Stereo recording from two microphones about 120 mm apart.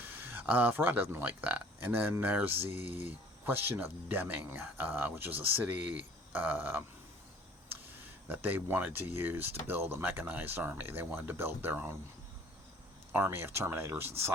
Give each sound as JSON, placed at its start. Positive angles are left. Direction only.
{"t": 0.0, "sound": "speech", "side_deg": -20}
{"t": 8.3, "sound": "speech", "side_deg": -15}
{"t": 13.1, "sound": "speech", "side_deg": -20}